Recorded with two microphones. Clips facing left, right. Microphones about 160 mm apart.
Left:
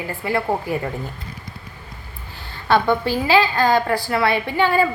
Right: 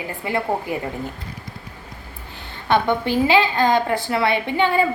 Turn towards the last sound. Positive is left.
turn(degrees=-20)  # may be behind; listen again after turning